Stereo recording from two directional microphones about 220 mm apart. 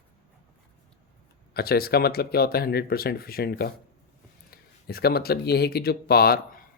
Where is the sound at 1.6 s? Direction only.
45° left (ahead or behind).